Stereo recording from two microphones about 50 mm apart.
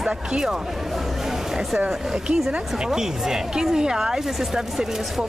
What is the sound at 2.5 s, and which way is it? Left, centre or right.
Speech, centre.